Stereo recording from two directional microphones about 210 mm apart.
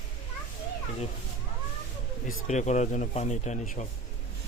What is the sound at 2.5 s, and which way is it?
Speech, 35° left (ahead or behind).